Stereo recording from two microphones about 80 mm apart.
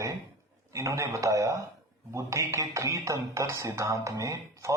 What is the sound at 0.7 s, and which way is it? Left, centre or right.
Speech, right.